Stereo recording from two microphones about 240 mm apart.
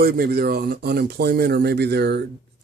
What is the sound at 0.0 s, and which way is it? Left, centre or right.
Speech, right.